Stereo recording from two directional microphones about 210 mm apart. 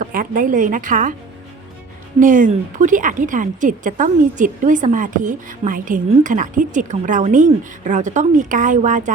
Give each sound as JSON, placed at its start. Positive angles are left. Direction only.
{"t": 0.0, "sound": "a woman's voice", "side_deg": -40}
{"t": 2.1, "sound": "a woman's voice", "side_deg": -40}